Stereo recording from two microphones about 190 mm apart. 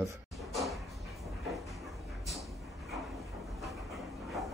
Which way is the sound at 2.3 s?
Centre (ahead or behind).